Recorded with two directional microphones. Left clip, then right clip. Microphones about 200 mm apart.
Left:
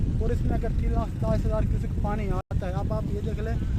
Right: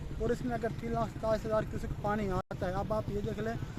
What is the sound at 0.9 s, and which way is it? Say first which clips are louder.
Speech: left 1 dB; 5° left (ahead or behind).